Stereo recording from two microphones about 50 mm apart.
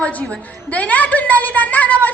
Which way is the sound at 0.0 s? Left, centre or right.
Left.